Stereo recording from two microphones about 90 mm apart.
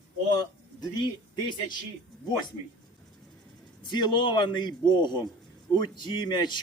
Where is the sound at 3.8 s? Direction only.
55° left (ahead or behind).